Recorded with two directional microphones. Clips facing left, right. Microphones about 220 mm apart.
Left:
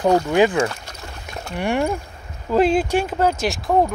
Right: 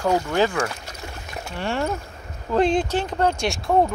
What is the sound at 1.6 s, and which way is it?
Speech, 15° left (ahead or behind).